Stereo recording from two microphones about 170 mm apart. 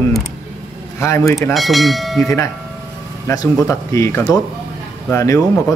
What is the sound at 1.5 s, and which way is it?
Speech, centre (ahead or behind).